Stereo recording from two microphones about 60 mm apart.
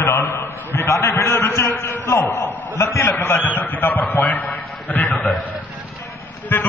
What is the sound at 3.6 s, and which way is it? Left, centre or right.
A man's voice, left.